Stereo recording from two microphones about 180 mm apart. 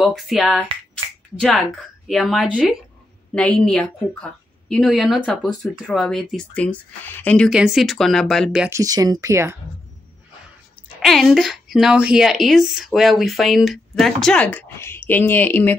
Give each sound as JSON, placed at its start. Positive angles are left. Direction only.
{"t": 0.0, "sound": "a woman's voice", "side_deg": 0}
{"t": 2.0, "sound": "a woman's voice", "side_deg": 0}
{"t": 7.4, "sound": "a woman's voice", "side_deg": -5}
{"t": 8.7, "sound": "speech", "side_deg": -20}
{"t": 11.0, "sound": "a woman's voice", "side_deg": 0}